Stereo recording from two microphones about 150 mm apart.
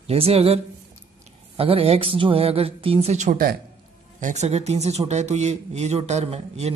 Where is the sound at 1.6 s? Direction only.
40° right (ahead or behind); by 3.5 s 65° right (ahead or behind).